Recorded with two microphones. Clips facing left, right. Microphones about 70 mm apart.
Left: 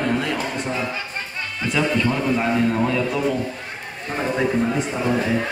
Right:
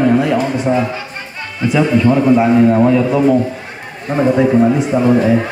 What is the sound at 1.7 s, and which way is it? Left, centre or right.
Speech, centre.